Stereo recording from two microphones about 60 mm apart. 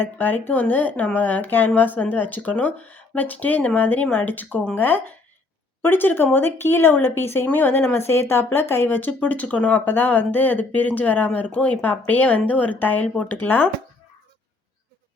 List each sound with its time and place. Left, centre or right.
0.0 s speech: left